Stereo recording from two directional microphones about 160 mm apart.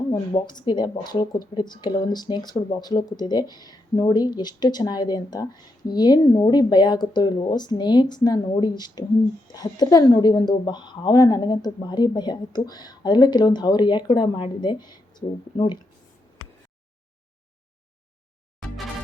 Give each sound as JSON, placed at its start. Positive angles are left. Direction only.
{"t": 0.1, "sound": "a woman's voice", "side_deg": 25}